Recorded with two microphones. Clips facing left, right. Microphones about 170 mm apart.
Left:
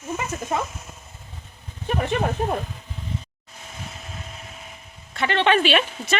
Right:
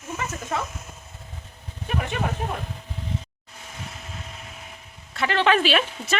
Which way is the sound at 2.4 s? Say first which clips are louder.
Left 6 dB; 40° left (ahead or behind).